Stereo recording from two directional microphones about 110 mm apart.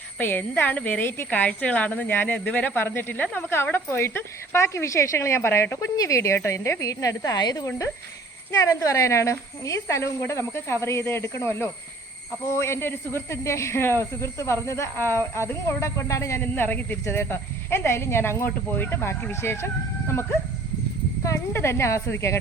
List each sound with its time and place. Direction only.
0.2 s a woman's voice: 15° left (ahead or behind)
21.2 s speech: 25° left (ahead or behind)